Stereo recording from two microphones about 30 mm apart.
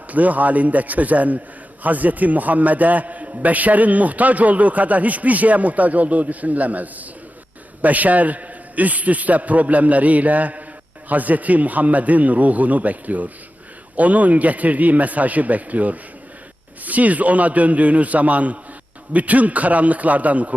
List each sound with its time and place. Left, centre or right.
0.1 s a man's voice: right